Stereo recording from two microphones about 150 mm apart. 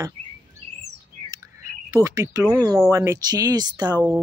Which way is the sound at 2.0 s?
20° right (ahead or behind).